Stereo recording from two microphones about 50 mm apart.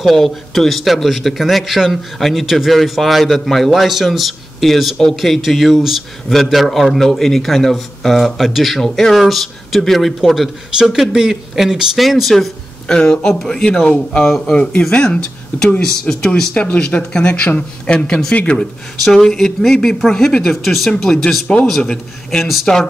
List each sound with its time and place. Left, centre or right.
0.0 s a man's voice: centre
8.7 s a man's voice: centre
12.8 s speech: centre
16.7 s speech: left
19.1 s speech: centre
22.4 s a man's voice: centre